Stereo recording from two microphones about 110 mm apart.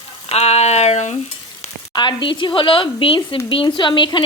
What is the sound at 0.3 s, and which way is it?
Speech, 75° left (ahead or behind).